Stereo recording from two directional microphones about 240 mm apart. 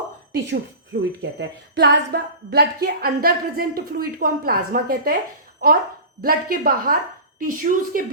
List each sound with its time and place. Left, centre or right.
1.2 s a woman's voice: right